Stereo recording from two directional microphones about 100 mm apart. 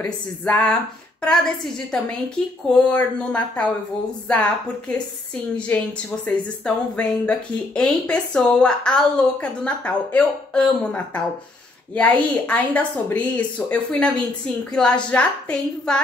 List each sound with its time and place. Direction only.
0.5 s speech: 10° left (ahead or behind)
2.7 s a woman's voice: 15° left (ahead or behind)